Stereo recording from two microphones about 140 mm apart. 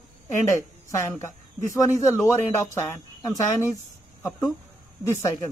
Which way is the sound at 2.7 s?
15° left (ahead or behind).